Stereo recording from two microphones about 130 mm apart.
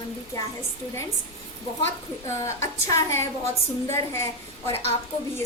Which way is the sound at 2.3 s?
20° left (ahead or behind).